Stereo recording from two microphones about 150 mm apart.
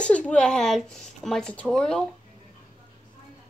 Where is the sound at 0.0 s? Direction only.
5° left (ahead or behind).